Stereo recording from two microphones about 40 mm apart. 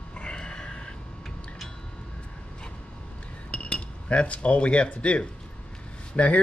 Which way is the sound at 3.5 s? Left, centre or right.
Left.